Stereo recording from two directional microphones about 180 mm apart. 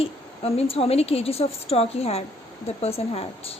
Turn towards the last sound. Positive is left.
turn(degrees=35)  # may be behind; listen again after turning